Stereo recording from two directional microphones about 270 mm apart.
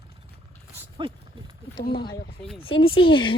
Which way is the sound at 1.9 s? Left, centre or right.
Centre.